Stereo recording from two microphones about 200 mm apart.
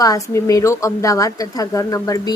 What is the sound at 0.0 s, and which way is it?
A woman's voice, 15° left (ahead or behind).